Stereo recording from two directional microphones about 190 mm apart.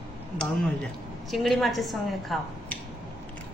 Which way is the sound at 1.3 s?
Centre (ahead or behind).